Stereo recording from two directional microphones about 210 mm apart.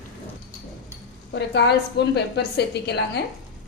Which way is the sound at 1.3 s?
55° left (ahead or behind).